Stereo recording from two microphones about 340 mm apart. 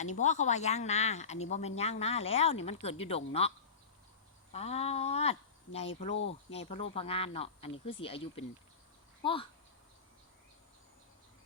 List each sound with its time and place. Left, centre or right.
0.0 s speech: left
4.5 s speech: centre